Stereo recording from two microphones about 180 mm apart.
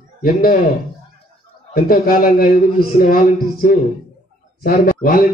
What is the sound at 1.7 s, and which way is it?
A man's voice, 55° left (ahead or behind).